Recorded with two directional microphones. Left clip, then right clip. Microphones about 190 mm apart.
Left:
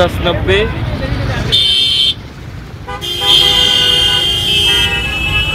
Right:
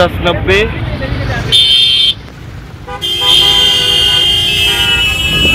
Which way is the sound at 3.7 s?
10° right (ahead or behind).